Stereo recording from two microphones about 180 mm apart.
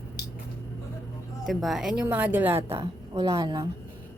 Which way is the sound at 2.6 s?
30° right (ahead or behind).